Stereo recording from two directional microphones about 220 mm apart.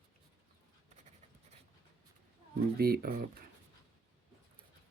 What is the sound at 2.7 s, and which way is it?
Speech, 45° right (ahead or behind).